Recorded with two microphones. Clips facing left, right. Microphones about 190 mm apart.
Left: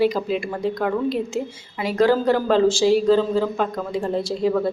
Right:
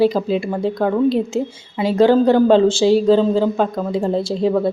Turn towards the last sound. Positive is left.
turn(degrees=-25)  # may be behind; listen again after turning